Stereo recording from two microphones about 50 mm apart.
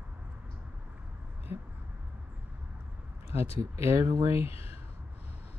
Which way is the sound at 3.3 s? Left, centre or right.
Right.